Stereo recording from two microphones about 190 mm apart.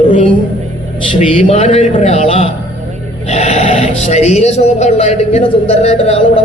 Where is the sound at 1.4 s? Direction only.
35° left (ahead or behind).